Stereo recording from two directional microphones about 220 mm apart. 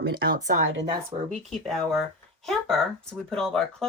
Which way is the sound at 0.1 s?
45° right (ahead or behind).